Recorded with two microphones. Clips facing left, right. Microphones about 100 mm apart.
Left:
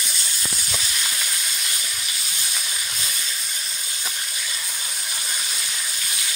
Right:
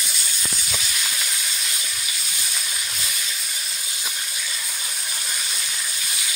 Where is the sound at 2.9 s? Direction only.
Centre (ahead or behind).